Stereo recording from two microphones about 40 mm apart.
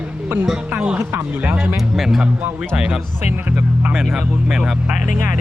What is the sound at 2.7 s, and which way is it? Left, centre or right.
Speech, right.